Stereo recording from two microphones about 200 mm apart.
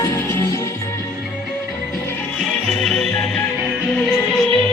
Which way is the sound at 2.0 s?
5° left (ahead or behind).